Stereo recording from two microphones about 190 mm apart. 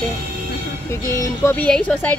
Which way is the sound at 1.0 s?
15° left (ahead or behind).